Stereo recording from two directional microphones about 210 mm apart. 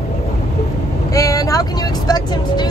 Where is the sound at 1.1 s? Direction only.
15° left (ahead or behind).